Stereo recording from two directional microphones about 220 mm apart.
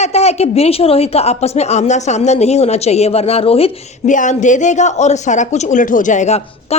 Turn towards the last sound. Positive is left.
turn(degrees=30)  # may be behind; listen again after turning